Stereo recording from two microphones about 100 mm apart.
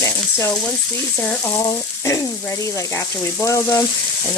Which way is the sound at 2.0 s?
30° left (ahead or behind).